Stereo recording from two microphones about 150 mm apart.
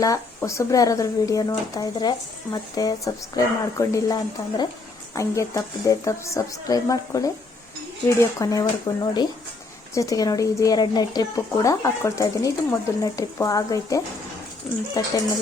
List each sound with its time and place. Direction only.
0.3 s speech: 20° left (ahead or behind)